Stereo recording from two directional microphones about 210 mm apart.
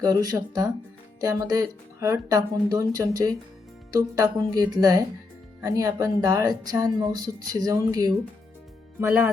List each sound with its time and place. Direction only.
0.0 s speech: 15° right (ahead or behind)